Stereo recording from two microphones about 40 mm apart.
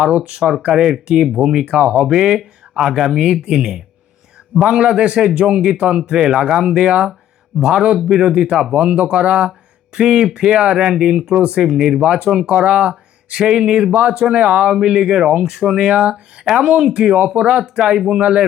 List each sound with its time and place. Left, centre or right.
0.7 s speech: centre
1.7 s speech: right
12.5 s speech: right